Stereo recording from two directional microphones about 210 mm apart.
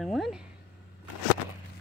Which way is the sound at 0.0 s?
Centre (ahead or behind).